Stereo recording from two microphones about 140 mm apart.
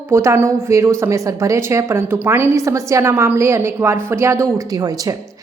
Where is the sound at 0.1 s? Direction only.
20° right (ahead or behind).